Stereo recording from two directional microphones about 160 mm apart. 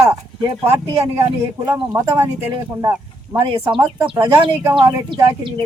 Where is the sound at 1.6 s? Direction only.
15° right (ahead or behind).